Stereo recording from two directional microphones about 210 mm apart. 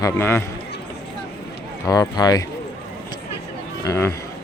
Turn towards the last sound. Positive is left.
turn(degrees=15)  # may be behind; listen again after turning